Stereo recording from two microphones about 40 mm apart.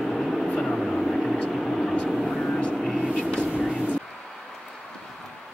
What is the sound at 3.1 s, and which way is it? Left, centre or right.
Vehicle, left.